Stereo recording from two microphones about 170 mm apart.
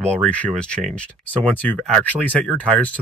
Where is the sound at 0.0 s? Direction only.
5° left (ahead or behind).